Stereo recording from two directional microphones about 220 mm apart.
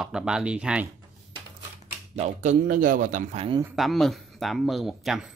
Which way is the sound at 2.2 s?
35° right (ahead or behind).